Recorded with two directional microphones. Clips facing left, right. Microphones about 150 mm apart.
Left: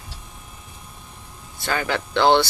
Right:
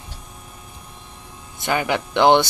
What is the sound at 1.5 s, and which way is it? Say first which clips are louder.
Speech: right 3 dB; 20° right (ahead or behind).